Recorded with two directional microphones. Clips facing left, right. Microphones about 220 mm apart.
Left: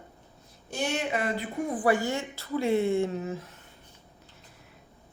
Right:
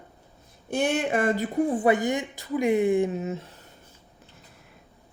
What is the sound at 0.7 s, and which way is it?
Speech, 55° right (ahead or behind).